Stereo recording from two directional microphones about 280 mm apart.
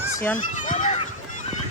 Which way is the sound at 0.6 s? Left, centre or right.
Left.